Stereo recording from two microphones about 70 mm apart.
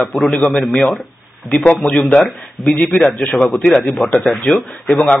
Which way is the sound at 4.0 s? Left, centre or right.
Centre.